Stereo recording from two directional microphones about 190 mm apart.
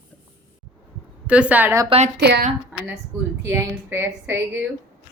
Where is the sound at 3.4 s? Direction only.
15° right (ahead or behind).